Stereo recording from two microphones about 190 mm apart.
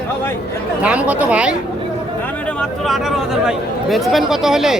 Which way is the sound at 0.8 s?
5° right (ahead or behind).